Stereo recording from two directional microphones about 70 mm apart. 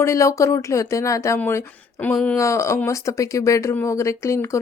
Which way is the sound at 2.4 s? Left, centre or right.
Left.